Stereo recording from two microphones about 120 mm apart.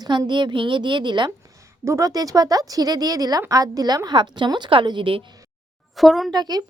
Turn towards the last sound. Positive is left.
turn(degrees=-35)  # may be behind; listen again after turning